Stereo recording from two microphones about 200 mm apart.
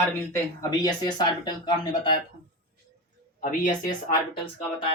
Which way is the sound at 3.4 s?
40° left (ahead or behind).